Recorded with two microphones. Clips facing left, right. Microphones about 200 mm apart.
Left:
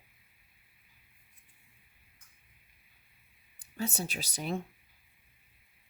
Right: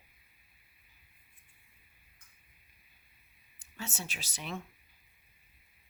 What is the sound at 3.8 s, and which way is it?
Speech, 35° left (ahead or behind).